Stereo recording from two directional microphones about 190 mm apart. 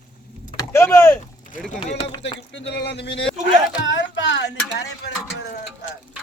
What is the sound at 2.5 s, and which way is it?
A man's voice, 65° left (ahead or behind).